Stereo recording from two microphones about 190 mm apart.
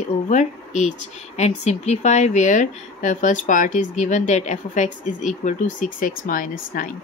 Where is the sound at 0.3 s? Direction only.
40° left (ahead or behind).